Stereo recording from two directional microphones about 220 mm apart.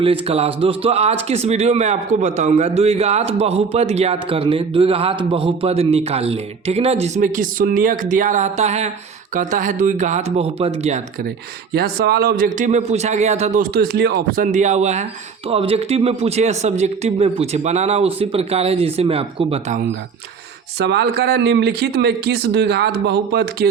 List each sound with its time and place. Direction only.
0.0 s a man's voice: 25° right (ahead or behind)
11.7 s a man's voice: 45° right (ahead or behind); by 19.8 s 30° right (ahead or behind)
20.7 s speech: 50° right (ahead or behind)